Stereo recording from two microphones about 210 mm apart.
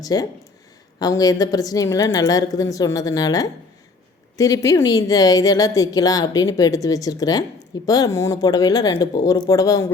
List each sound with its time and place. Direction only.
0.0 s a woman's voice: 15° left (ahead or behind)